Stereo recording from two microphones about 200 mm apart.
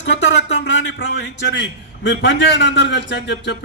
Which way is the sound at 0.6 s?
65° left (ahead or behind).